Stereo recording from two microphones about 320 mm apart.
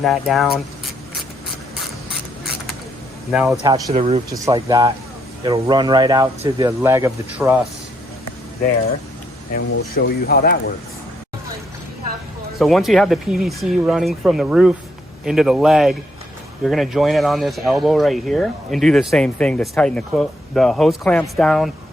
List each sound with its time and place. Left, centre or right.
0.0 s speech: centre
3.2 s speech: centre
3.8 s speech: centre
9.5 s speech: left
9.9 s speech: left
12.5 s speech: centre